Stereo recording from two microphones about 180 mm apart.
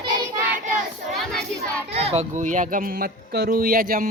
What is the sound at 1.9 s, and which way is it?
Speech, 35° right (ahead or behind).